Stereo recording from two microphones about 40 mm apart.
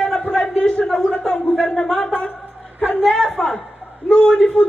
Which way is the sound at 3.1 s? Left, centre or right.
Centre.